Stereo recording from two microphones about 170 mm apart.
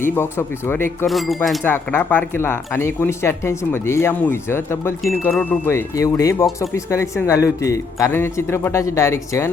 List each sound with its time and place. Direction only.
0.0 s speech: 15° left (ahead or behind)
1.0 s speech: centre (ahead or behind)
1.6 s speech: 10° left (ahead or behind)